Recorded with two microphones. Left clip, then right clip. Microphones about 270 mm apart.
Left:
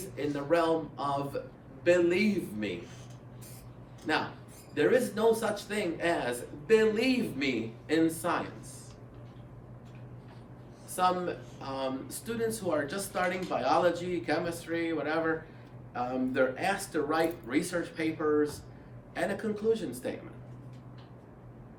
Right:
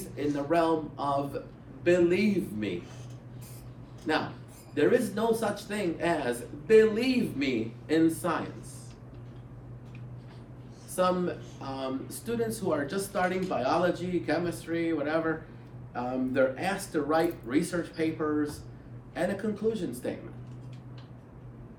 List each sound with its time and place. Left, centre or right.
0.3 s speech: centre
4.1 s speech: centre
10.9 s speech: centre